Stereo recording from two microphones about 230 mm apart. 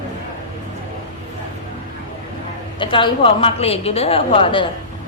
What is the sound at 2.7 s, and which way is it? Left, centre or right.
A woman's voice, left.